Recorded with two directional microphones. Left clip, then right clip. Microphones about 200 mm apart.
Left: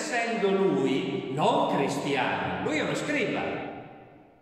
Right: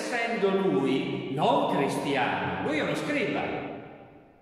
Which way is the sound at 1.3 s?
Centre (ahead or behind).